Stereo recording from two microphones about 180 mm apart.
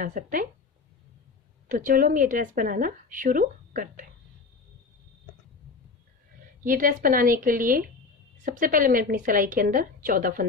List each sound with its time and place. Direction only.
0.0 s speech: 50° right (ahead or behind)
1.7 s speech: 45° right (ahead or behind)
6.6 s speech: 50° right (ahead or behind)